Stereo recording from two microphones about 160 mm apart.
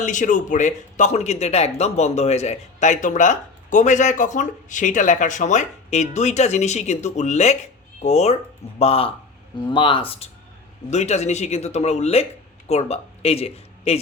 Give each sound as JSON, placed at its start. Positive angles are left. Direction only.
{"t": 0.0, "sound": "speech", "side_deg": 50}